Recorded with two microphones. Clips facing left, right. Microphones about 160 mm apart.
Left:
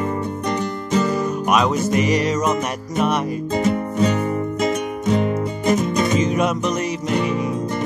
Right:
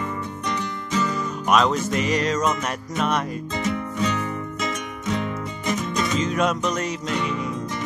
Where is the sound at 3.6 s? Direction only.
40° left (ahead or behind).